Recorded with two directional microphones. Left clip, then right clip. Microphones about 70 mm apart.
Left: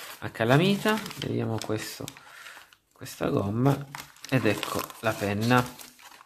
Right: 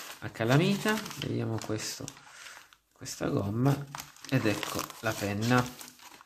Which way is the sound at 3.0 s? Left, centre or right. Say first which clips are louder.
Left 4 dB; left.